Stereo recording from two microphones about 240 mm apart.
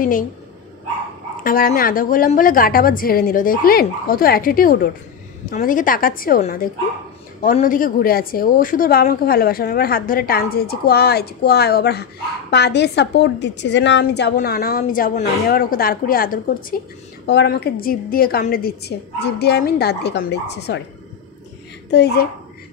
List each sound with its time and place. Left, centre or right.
1.4 s a woman's voice: left
21.9 s a woman's voice: left